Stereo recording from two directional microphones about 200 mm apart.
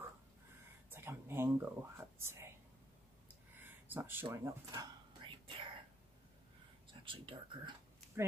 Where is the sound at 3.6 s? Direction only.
10° right (ahead or behind).